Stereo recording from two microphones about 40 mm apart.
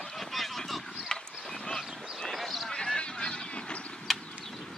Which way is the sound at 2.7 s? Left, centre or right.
Left.